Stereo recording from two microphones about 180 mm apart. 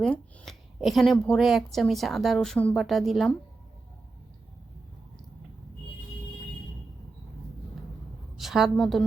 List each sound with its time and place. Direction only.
0.0 s speech: 5° left (ahead or behind)
8.4 s a woman's voice: centre (ahead or behind)